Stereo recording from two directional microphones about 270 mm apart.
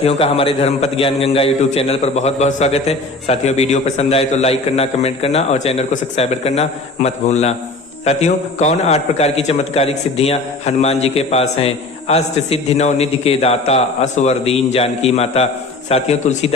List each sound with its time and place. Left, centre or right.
0.0 s a man's voice: left